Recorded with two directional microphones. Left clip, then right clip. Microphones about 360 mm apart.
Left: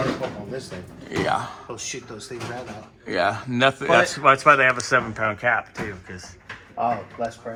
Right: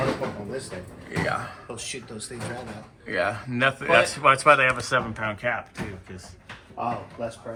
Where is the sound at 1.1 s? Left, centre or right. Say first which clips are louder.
Left 3 dB; centre.